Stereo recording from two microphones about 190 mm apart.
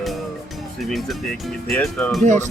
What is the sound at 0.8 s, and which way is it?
Speech, centre (ahead or behind).